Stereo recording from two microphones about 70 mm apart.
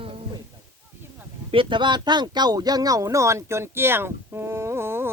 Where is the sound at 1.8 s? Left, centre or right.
Right.